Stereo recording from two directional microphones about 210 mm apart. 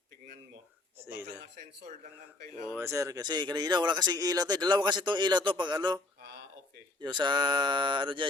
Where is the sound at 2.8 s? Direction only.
15° right (ahead or behind).